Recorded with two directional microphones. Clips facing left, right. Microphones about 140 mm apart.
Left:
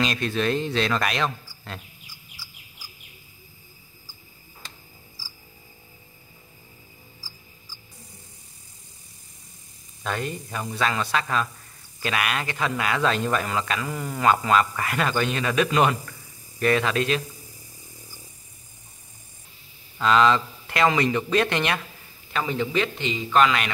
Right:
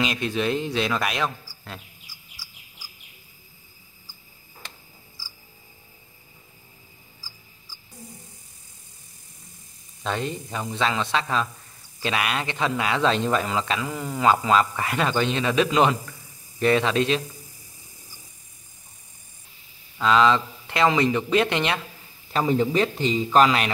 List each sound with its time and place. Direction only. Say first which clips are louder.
0.0 s a man's voice: even; 15° right (ahead or behind)
10.0 s a man's voice: right 1 dB; 25° right (ahead or behind)
13.7 s speech: right 1 dB; centre (ahead or behind)
14.5 s a man's voice: right 1 dB; 25° right (ahead or behind)
20.0 s a man's voice: even; 20° right (ahead or behind)
22.3 s a man's voice: right 4 dB; 35° right (ahead or behind)